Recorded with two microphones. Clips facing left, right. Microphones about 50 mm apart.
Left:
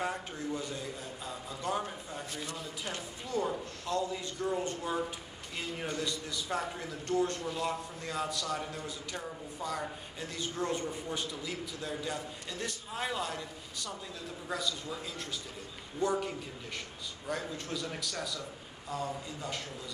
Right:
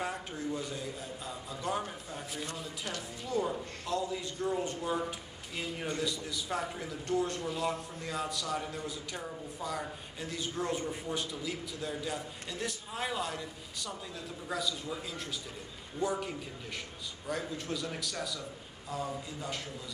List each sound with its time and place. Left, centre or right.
0.0 s a man's voice: centre